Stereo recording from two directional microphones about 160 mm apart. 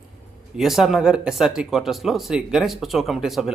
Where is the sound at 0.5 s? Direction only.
Centre (ahead or behind).